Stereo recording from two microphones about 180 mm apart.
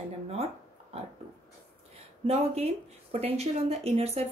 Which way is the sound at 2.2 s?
35° right (ahead or behind).